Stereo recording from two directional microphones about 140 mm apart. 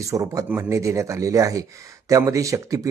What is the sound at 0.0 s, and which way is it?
Speech, 25° right (ahead or behind).